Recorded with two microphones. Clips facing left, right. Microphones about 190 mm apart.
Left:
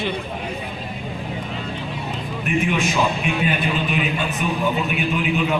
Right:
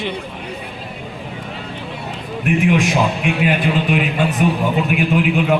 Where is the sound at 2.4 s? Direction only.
80° right.